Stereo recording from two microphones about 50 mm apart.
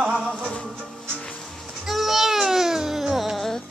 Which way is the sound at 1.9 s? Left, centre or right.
Centre.